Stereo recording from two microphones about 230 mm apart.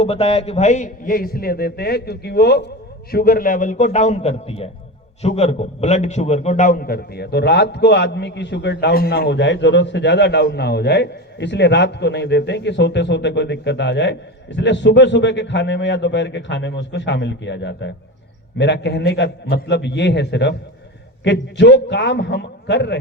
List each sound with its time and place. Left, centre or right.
0.0 s a man's voice: left